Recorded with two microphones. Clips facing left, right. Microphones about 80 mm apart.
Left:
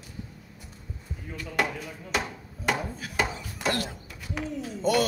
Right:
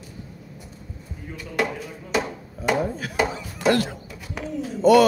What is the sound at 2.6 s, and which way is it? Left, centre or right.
Chop, centre.